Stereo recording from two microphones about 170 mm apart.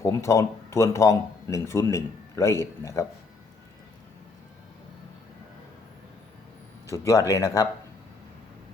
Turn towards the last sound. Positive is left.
turn(degrees=20)  # may be behind; listen again after turning